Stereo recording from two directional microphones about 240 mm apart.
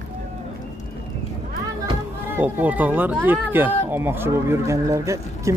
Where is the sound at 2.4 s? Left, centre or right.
Centre.